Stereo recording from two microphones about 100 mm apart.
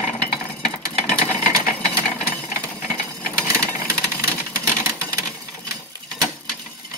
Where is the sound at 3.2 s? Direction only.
15° left (ahead or behind).